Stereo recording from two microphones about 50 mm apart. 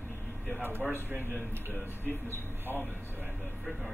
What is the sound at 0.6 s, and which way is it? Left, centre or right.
Speech, right.